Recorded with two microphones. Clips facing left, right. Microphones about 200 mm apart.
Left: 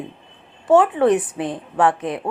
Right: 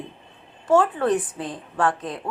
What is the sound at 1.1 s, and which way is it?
Speech, 65° left (ahead or behind).